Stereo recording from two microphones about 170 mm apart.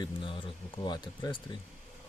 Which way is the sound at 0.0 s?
30° left (ahead or behind).